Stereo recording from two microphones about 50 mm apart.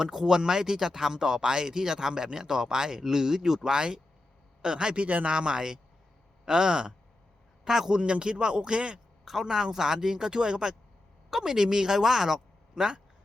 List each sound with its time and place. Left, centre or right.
0.0 s speech: centre
9.2 s a woman's voice: centre